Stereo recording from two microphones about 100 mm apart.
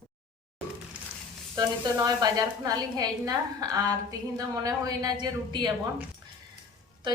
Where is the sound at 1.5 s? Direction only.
35° right (ahead or behind).